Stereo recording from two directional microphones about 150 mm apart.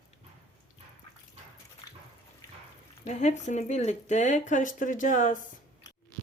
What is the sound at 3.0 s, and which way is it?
Speech, 50° left (ahead or behind).